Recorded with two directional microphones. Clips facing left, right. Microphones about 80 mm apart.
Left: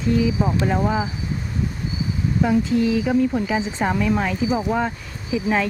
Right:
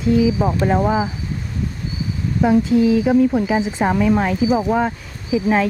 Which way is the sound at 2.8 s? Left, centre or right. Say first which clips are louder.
Right 5 dB; centre.